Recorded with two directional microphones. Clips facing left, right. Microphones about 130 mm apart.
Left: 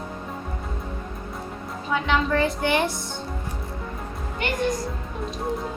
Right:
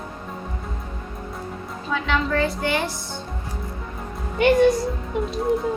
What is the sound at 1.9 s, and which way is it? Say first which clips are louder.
Speech: even; 20° left (ahead or behind).